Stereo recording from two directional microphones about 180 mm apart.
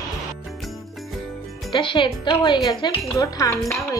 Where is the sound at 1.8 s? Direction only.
30° left (ahead or behind).